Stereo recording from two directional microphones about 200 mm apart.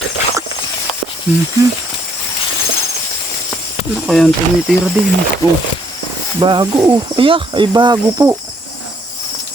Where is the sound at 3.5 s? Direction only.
Centre (ahead or behind).